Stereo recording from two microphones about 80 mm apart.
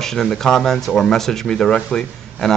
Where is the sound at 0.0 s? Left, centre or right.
Centre.